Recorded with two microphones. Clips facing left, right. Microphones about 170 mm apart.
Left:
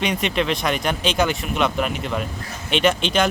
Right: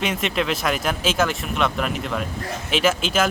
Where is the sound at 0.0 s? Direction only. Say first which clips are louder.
Left 1 dB; centre (ahead or behind).